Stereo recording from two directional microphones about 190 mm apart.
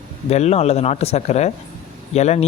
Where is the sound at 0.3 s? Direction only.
35° left (ahead or behind).